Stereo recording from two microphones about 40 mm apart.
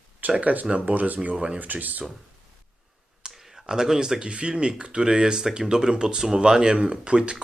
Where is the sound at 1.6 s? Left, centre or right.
Right.